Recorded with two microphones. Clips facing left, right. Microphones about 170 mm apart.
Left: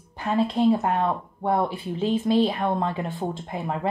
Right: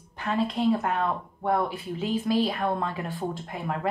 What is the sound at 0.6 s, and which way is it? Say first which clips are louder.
Speech: left 4 dB; 30° left (ahead or behind).